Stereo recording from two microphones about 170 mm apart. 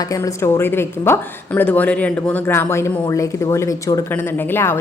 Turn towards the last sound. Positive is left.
turn(degrees=15)  # may be behind; listen again after turning